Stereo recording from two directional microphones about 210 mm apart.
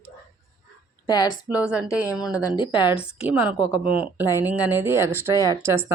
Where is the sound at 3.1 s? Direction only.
5° right (ahead or behind).